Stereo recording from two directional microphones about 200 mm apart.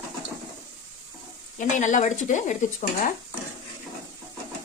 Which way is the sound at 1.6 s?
40° left (ahead or behind).